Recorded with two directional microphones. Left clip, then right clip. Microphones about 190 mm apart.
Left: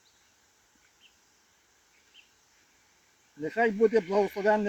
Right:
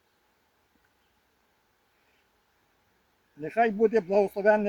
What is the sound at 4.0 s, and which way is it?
Speech, 5° right (ahead or behind).